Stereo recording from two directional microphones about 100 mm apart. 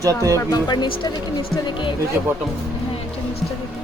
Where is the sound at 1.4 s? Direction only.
55° left (ahead or behind).